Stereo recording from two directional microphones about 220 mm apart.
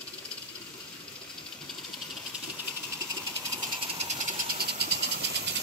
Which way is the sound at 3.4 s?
20° right (ahead or behind).